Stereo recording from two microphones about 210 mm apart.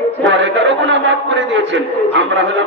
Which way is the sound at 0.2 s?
60° right (ahead or behind).